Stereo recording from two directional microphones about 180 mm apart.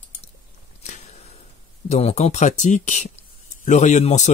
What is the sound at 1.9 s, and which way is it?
Speech, 35° left (ahead or behind).